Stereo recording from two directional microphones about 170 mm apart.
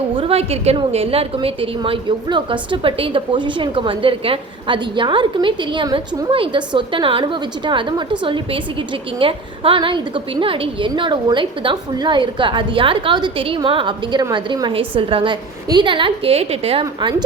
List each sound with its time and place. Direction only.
0.2 s a woman's voice: 35° right (ahead or behind)
16.8 s a woman's voice: 25° right (ahead or behind)